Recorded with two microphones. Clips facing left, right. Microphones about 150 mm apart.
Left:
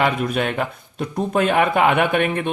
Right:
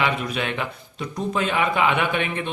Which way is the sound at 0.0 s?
50° left (ahead or behind).